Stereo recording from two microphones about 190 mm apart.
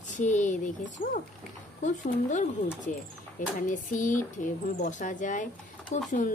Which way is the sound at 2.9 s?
45° left (ahead or behind).